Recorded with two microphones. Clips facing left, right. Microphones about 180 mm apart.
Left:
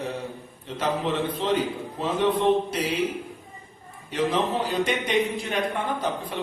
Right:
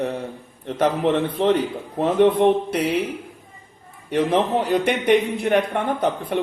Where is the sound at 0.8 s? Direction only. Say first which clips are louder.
Right 6 dB; 60° right (ahead or behind).